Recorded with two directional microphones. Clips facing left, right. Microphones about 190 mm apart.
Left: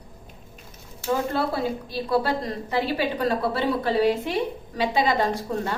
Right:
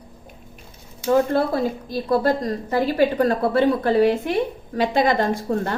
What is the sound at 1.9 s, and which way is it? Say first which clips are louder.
A woman's voice: right 5 dB; 45° right (ahead or behind).